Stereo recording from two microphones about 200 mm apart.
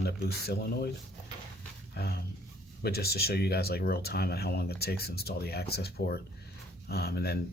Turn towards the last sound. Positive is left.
turn(degrees=50)  # may be behind; listen again after turning